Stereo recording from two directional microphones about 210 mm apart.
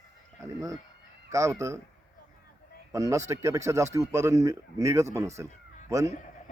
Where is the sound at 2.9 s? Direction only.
15° right (ahead or behind).